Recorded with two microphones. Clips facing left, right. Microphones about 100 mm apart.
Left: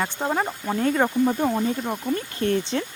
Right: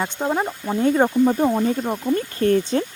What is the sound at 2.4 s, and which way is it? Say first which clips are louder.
Speech: right 5 dB; 45° right (ahead or behind).